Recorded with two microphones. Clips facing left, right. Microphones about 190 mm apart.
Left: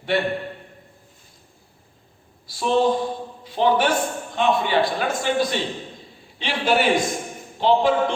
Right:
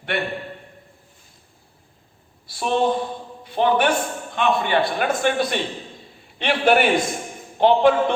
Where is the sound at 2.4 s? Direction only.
60° right (ahead or behind).